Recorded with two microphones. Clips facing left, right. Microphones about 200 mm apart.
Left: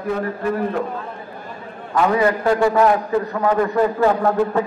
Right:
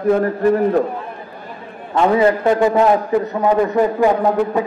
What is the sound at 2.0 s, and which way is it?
A man's voice, 25° right (ahead or behind).